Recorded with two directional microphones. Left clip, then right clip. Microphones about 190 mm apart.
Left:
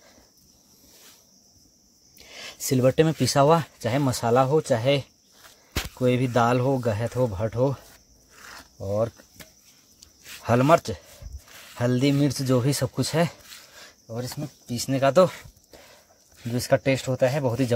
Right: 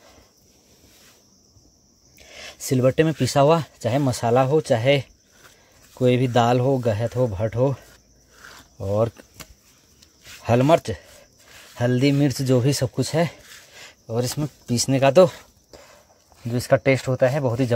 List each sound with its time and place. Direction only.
2.1 s speech: centre (ahead or behind)
8.7 s speech: 25° right (ahead or behind)
10.3 s speech: 10° right (ahead or behind)
13.7 s a sound: 20° right (ahead or behind)
14.1 s speech: 35° right (ahead or behind); by 15.3 s 20° right (ahead or behind)
15.7 s dog: centre (ahead or behind)
16.4 s speech: centre (ahead or behind)